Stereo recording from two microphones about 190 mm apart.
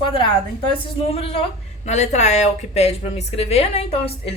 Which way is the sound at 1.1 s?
30° left (ahead or behind).